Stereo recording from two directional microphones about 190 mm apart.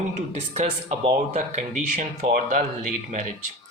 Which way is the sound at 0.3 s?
35° right (ahead or behind).